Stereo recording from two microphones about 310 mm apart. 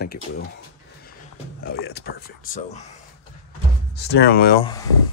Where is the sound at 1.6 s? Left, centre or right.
Left.